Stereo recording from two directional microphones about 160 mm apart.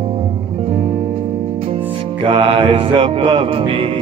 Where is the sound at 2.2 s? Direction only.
35° right (ahead or behind).